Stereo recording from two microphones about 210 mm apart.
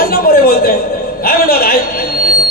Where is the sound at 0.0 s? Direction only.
45° left (ahead or behind).